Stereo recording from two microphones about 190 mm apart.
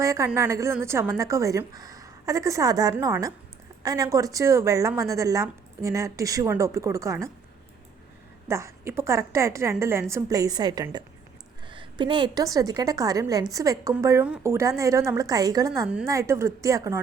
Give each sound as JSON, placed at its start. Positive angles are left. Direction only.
{"t": 0.0, "sound": "a woman's voice", "side_deg": -15}
{"t": 8.4, "sound": "a woman's voice", "side_deg": -15}